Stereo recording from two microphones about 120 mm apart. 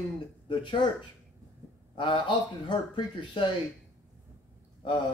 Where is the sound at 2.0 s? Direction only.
40° left (ahead or behind).